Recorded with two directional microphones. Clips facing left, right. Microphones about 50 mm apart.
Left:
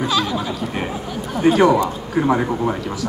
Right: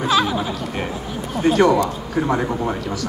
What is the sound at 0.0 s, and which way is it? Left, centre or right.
Chatter, centre.